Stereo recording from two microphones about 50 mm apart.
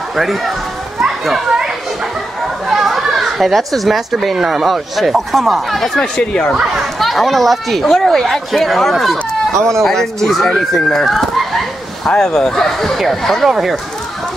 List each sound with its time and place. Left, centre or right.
0.1 s speech: centre
2.7 s a child's voice: centre
5.9 s speech: centre
7.0 s speech: centre
10.7 s a sound: centre
12.2 s speech: centre